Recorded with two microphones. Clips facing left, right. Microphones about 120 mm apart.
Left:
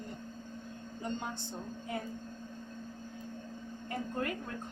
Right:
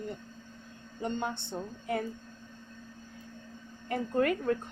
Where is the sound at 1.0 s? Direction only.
65° right (ahead or behind).